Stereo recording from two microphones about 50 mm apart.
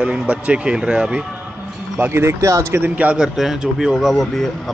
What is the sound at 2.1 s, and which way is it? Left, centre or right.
Speech, right.